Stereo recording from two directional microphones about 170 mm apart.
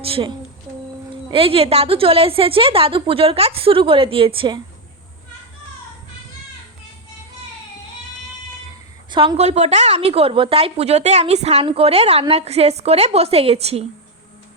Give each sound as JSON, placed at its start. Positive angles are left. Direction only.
{"t": 0.0, "sound": "a woman's voice", "side_deg": -30}
{"t": 9.0, "sound": "a woman's voice", "side_deg": -30}